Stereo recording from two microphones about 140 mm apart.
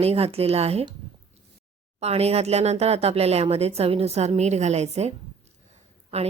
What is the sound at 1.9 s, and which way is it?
A woman's voice, 50° right (ahead or behind).